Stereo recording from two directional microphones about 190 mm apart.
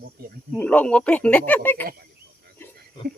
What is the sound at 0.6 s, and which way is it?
Speech, 10° left (ahead or behind).